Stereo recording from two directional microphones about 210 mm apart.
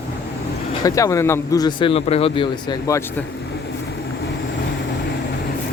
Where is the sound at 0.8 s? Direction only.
15° left (ahead or behind).